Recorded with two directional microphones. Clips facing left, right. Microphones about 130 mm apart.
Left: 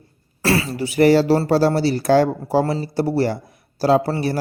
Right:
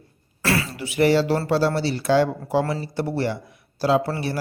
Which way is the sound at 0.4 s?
30° left (ahead or behind).